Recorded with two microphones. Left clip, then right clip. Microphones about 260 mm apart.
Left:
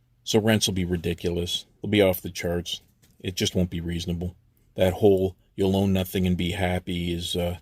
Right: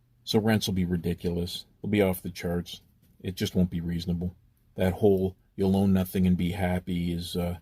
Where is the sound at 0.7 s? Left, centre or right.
Left.